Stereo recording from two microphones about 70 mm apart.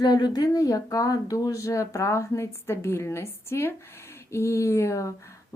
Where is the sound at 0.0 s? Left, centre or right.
Left.